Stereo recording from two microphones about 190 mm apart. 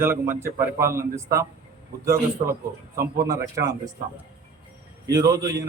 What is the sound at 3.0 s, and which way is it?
Speech, 20° right (ahead or behind).